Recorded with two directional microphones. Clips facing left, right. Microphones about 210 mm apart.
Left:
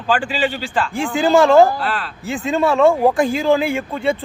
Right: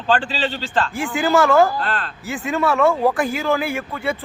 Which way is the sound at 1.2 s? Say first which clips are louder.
Left 4 dB; 25° left (ahead or behind).